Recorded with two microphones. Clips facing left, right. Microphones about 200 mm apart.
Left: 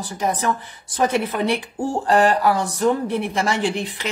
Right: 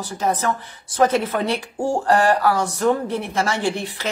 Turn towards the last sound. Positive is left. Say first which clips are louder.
# even
turn(degrees=15)  # may be behind; listen again after turning